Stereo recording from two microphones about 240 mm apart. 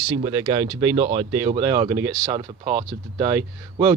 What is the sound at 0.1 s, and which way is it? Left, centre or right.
Speech, centre.